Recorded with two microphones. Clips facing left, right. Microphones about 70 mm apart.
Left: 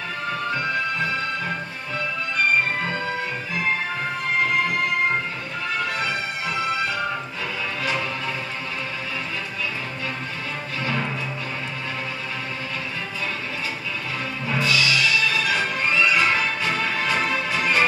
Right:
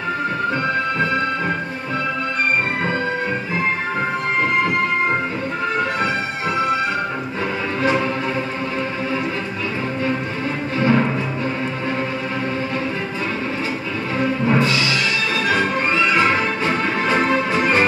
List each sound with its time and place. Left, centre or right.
10.8 s music: right
14.2 s music: right